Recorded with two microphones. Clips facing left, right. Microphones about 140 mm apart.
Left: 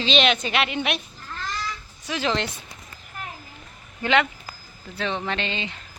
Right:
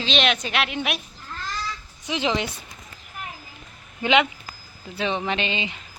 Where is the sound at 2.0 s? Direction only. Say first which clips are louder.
Right 1 dB; 20° right (ahead or behind).